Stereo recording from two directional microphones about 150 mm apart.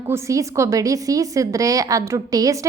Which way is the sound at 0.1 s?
20° right (ahead or behind).